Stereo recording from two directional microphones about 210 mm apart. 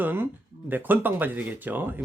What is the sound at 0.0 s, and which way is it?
Speech, 10° right (ahead or behind).